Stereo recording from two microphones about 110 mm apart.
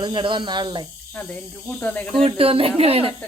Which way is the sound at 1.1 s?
15° left (ahead or behind).